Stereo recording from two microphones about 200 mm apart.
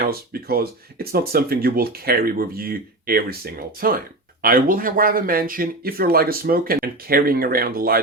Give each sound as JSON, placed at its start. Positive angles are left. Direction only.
{"t": 0.0, "sound": "speech", "side_deg": -50}